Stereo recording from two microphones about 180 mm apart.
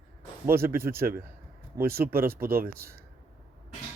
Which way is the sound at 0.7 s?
15° right (ahead or behind).